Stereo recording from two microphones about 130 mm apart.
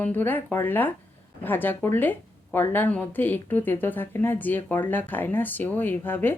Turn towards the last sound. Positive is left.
turn(degrees=15)  # may be behind; listen again after turning